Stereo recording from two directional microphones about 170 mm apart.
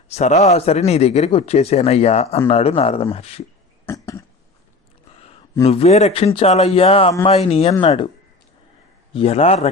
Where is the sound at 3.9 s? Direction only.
15° left (ahead or behind).